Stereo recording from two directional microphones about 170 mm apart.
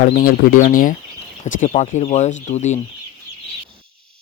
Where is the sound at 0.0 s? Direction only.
55° left (ahead or behind).